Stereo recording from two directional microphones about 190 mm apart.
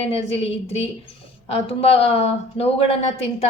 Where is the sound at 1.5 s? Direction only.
30° left (ahead or behind).